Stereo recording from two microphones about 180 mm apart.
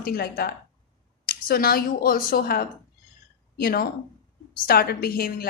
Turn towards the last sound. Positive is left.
turn(degrees=55)  # may be behind; listen again after turning